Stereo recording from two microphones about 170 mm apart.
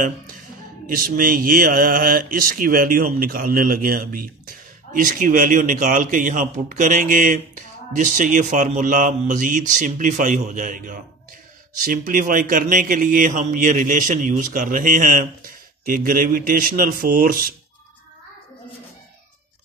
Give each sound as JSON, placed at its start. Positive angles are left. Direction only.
{"t": 0.8, "sound": "speech", "side_deg": -55}